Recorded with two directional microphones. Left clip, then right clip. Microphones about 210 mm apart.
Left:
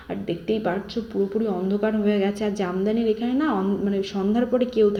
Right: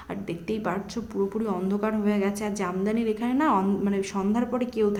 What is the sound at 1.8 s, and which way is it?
Speech, 10° left (ahead or behind).